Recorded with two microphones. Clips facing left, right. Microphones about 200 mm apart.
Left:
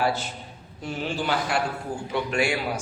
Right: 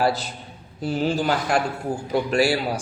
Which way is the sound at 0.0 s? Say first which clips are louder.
Right 3 dB; 35° right (ahead or behind).